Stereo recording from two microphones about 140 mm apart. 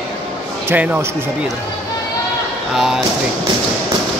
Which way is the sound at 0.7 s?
10° right (ahead or behind).